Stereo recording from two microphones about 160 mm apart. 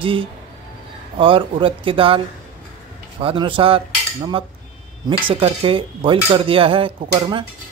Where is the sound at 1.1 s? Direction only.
30° right (ahead or behind).